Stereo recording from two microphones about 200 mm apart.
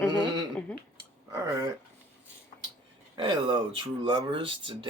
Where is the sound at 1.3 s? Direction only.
15° right (ahead or behind).